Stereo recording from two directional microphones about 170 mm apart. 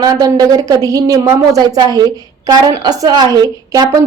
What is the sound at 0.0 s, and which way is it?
A woman's voice, 20° right (ahead or behind).